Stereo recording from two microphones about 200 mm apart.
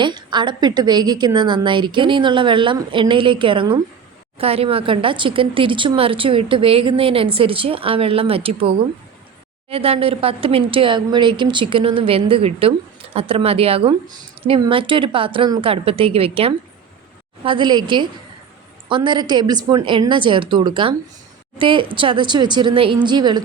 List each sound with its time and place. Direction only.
0.0 s speech: 20° right (ahead or behind)